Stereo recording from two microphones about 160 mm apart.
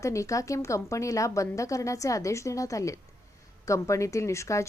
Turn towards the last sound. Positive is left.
turn(degrees=20)  # may be behind; listen again after turning